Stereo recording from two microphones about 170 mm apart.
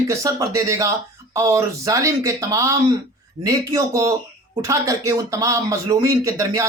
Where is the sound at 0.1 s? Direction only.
20° right (ahead or behind).